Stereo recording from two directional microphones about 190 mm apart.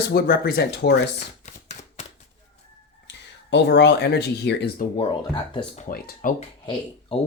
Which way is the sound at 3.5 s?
65° left (ahead or behind).